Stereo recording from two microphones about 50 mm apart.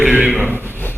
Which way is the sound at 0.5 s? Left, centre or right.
Right.